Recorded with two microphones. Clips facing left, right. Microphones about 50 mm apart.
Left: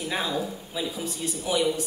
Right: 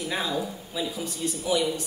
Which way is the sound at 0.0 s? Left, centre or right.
Centre.